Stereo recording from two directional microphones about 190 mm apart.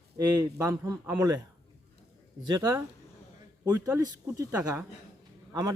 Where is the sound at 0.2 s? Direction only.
20° right (ahead or behind).